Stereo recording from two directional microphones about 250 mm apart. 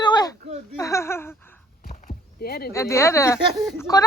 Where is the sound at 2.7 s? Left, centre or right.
Centre.